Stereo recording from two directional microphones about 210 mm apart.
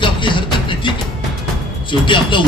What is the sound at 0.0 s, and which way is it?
Music, 25° left (ahead or behind).